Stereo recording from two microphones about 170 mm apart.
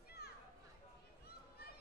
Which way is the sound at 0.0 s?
70° left (ahead or behind).